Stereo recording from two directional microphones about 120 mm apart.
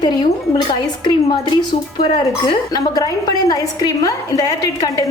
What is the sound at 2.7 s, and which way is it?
A woman's voice, 30° left (ahead or behind).